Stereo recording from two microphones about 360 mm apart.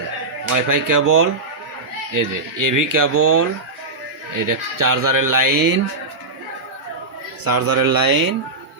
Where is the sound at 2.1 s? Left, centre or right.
Right.